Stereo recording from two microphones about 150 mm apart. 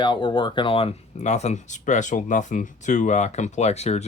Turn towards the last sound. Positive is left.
turn(degrees=45)  # may be behind; listen again after turning